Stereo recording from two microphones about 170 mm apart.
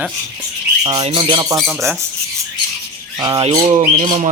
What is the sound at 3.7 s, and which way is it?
Speech, 45° right (ahead or behind).